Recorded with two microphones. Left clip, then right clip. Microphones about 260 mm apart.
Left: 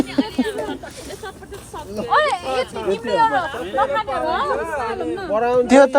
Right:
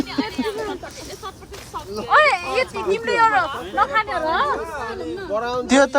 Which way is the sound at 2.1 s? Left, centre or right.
Right.